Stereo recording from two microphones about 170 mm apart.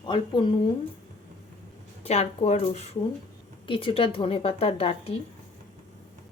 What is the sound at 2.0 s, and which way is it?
Speech, 40° left (ahead or behind).